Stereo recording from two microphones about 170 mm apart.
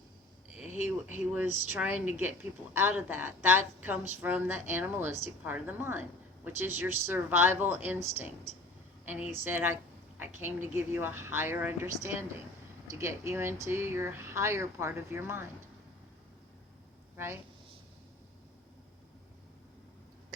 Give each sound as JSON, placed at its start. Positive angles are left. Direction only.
{"t": 0.6, "sound": "a sound", "side_deg": 45}
{"t": 0.9, "sound": "speech", "side_deg": -10}
{"t": 17.2, "sound": "speech", "side_deg": -15}